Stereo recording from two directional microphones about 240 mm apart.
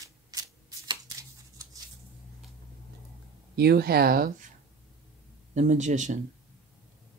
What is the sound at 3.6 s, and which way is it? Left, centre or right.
Speech, right.